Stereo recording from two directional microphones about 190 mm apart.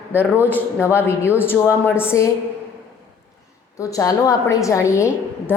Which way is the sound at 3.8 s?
15° left (ahead or behind).